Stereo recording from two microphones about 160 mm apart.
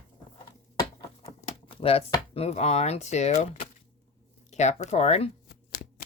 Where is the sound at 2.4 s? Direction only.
40° left (ahead or behind).